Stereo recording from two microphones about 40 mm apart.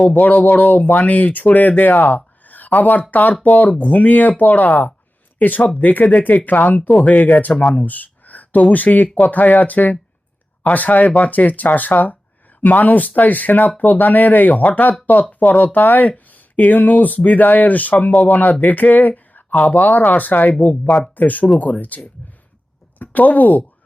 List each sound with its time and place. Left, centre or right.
0.0 s a woman's voice: left